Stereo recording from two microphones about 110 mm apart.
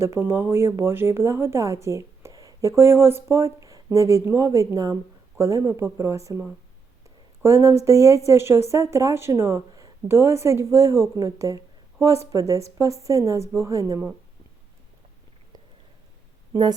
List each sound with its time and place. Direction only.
0.0 s a woman's voice: 25° right (ahead or behind)
7.4 s a woman's voice: 25° right (ahead or behind)